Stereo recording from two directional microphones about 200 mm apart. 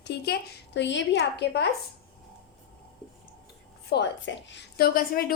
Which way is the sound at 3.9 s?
60° left (ahead or behind).